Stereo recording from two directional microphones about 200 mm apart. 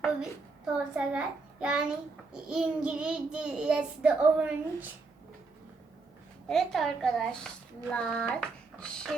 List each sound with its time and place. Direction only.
0.0 s a child's voice: 5° right (ahead or behind)
6.5 s a child's voice: centre (ahead or behind)